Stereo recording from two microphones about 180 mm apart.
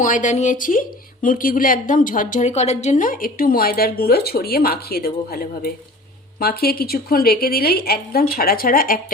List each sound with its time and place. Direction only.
0.0 s a woman's voice: 45° left (ahead or behind)